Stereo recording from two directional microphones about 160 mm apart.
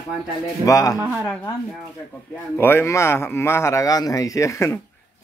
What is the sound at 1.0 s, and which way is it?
Speech, 15° right (ahead or behind).